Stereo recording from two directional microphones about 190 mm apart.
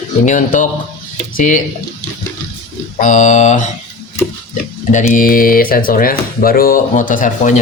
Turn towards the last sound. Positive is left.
turn(degrees=40)  # may be behind; listen again after turning